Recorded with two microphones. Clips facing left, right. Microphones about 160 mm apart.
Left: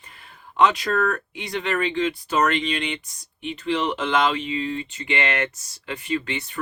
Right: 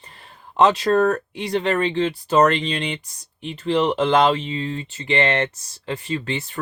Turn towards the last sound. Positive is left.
turn(degrees=-35)  # may be behind; listen again after turning